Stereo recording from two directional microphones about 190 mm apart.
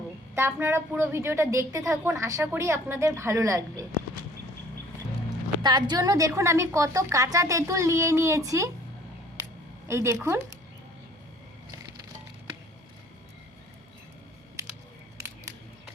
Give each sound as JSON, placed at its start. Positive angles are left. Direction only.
{"t": 0.3, "sound": "a woman's voice", "side_deg": -15}
{"t": 5.6, "sound": "a woman's voice", "side_deg": -20}
{"t": 9.9, "sound": "a woman's voice", "side_deg": -15}